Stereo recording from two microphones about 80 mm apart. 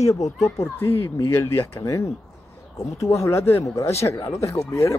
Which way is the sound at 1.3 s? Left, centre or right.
Left.